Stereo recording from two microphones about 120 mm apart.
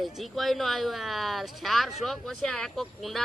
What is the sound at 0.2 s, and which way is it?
Speech, centre (ahead or behind).